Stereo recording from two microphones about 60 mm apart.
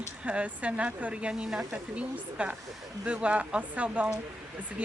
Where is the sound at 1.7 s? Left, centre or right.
Right.